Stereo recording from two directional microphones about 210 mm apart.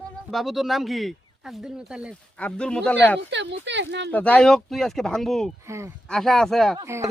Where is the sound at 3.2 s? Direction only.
55° right (ahead or behind).